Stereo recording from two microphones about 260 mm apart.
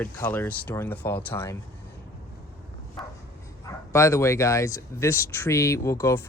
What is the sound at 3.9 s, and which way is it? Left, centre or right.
Speech, centre.